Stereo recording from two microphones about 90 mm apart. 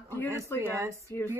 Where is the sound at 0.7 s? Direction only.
35° right (ahead or behind).